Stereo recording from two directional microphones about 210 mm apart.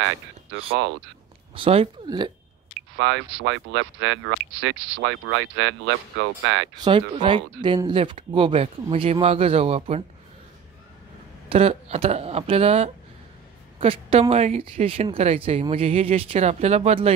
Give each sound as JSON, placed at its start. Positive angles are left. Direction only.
{"t": 1.5, "sound": "speech", "side_deg": -25}
{"t": 3.0, "sound": "speech", "side_deg": -65}
{"t": 6.8, "sound": "speech", "side_deg": -20}
{"t": 11.4, "sound": "speech", "side_deg": -30}